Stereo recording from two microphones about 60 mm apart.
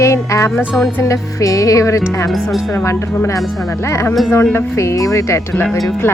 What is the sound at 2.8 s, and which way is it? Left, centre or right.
Music, left.